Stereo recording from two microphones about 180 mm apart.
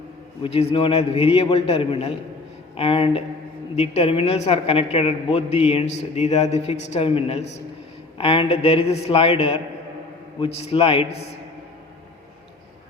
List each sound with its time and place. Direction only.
0.4 s a woman's voice: 30° left (ahead or behind)